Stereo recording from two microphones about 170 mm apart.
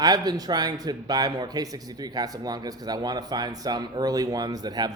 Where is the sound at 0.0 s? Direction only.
20° right (ahead or behind).